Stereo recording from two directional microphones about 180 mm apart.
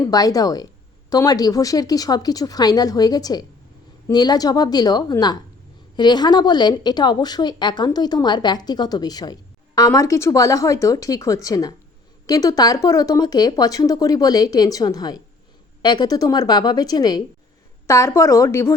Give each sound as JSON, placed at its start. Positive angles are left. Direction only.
{"t": 0.0, "sound": "a woman's voice", "side_deg": 20}